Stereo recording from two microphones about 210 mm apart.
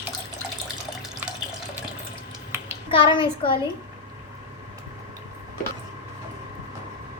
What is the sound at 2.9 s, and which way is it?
Speech, 25° left (ahead or behind).